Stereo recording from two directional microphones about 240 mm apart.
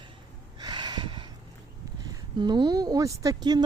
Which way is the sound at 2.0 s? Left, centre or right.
Centre.